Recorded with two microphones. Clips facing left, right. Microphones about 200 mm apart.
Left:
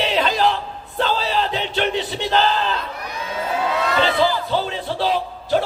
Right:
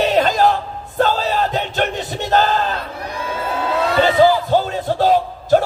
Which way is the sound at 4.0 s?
45° right (ahead or behind).